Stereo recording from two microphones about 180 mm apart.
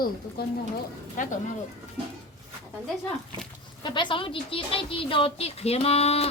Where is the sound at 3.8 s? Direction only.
25° left (ahead or behind).